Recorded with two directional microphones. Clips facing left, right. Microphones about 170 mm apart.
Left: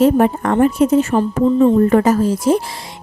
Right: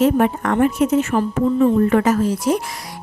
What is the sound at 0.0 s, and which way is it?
Speech, 30° left (ahead or behind).